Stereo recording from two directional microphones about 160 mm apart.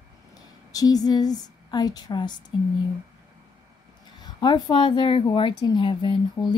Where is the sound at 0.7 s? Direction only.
25° left (ahead or behind).